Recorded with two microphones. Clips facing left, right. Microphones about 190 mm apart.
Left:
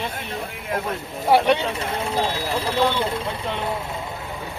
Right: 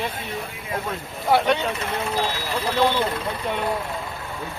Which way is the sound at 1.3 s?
10° left (ahead or behind).